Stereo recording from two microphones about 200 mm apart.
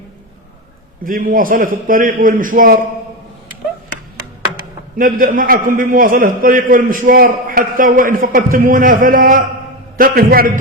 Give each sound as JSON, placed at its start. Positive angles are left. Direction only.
{"t": 1.0, "sound": "a man's voice", "side_deg": -45}
{"t": 4.9, "sound": "a man's voice", "side_deg": -45}